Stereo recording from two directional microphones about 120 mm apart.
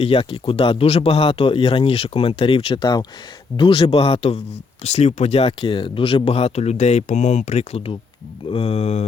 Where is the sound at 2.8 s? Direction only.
35° left (ahead or behind).